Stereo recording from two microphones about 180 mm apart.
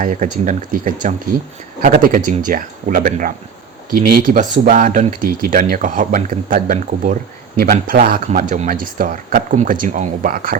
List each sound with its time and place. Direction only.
0.0 s speech: 45° right (ahead or behind)